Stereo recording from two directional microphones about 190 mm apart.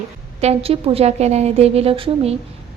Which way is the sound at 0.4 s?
30° right (ahead or behind).